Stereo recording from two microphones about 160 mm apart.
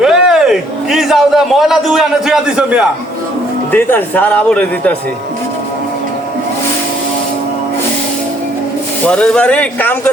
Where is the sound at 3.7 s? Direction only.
10° left (ahead or behind).